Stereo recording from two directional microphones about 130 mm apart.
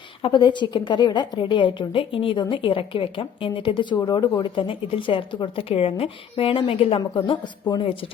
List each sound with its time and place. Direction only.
0.2 s a woman's voice: 35° left (ahead or behind)